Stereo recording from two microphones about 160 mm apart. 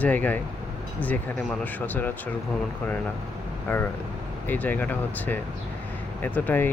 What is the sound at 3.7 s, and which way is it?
Speech, 15° left (ahead or behind).